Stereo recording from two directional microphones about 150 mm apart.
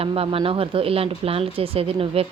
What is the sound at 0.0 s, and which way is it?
A woman's voice, 40° right (ahead or behind).